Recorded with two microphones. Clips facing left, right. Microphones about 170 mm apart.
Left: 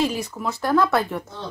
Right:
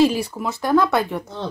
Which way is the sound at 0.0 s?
10° right (ahead or behind).